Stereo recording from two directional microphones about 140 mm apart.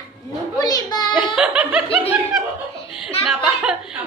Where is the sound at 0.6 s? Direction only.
25° left (ahead or behind).